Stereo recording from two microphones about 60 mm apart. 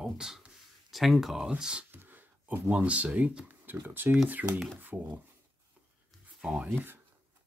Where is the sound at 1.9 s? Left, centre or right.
Right.